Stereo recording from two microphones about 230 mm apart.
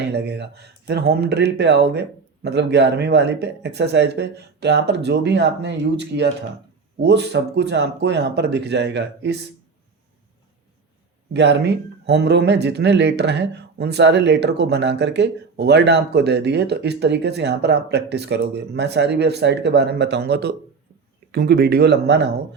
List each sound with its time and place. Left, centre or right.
0.1 s speech: right
11.3 s speech: right